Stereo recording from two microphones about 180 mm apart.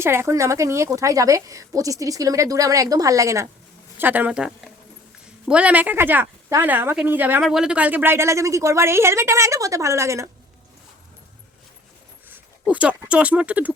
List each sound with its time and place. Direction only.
0.0 s speech: 15° right (ahead or behind)
12.6 s speech: 5° right (ahead or behind)